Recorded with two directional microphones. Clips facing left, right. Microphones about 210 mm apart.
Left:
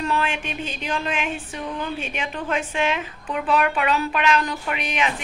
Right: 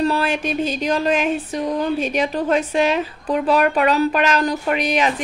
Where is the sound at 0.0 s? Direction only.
35° right (ahead or behind).